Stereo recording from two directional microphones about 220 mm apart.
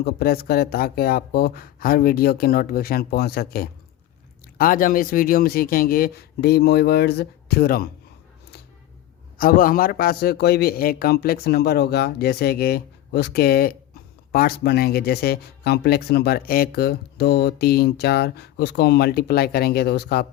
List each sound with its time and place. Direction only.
0.0 s a man's voice: 45° left (ahead or behind)
9.4 s a man's voice: 40° left (ahead or behind)